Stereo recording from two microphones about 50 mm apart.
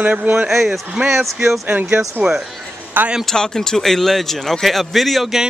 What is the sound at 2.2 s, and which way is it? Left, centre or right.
Speech, right.